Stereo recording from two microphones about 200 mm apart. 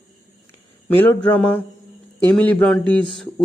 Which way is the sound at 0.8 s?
5° left (ahead or behind).